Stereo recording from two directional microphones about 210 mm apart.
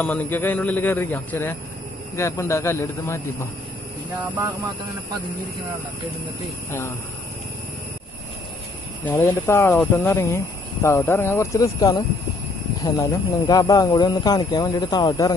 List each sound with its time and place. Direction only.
0.0 s speech: 10° left (ahead or behind)
9.1 s speech: 10° left (ahead or behind)